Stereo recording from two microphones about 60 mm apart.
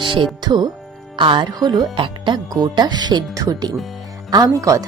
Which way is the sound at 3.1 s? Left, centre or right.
Right.